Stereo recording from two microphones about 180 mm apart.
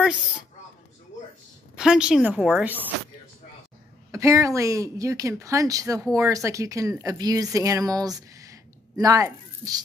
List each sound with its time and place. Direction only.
1.8 s a woman's voice: 5° right (ahead or behind)
4.1 s speech: 15° right (ahead or behind)